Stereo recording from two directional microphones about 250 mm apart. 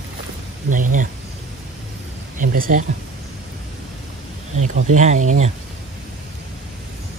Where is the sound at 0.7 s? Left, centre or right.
Right.